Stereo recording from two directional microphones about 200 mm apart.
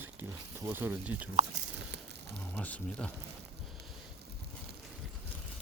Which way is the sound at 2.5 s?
10° left (ahead or behind).